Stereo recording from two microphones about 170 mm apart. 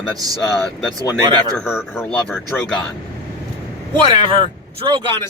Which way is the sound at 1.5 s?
Centre (ahead or behind).